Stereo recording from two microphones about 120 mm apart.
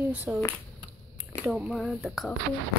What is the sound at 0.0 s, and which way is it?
Speech, 15° right (ahead or behind).